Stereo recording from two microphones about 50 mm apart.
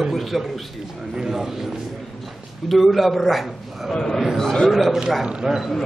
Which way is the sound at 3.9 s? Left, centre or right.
Centre.